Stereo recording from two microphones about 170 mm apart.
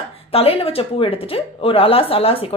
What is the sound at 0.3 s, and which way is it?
Speech, 35° left (ahead or behind).